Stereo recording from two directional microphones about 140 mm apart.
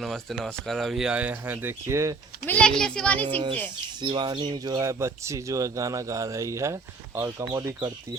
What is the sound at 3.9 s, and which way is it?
Speech, 35° right (ahead or behind).